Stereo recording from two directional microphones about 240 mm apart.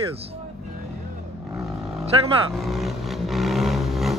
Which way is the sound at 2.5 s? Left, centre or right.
Centre.